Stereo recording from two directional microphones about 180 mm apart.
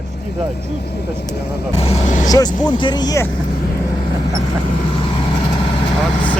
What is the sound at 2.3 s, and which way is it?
Speech, 20° left (ahead or behind).